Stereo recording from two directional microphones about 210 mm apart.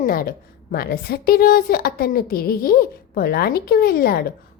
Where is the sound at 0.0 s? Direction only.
45° left (ahead or behind).